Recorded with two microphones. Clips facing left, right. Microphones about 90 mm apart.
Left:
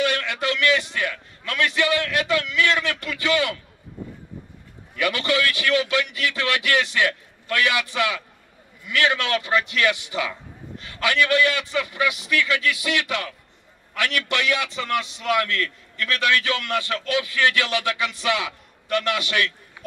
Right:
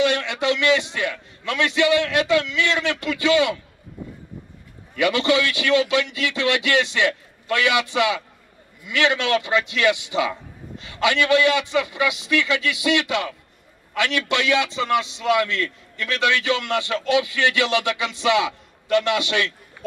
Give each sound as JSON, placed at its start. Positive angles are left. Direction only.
{"t": 0.0, "sound": "a man's voice", "side_deg": -20}
{"t": 4.9, "sound": "a man's voice", "side_deg": -20}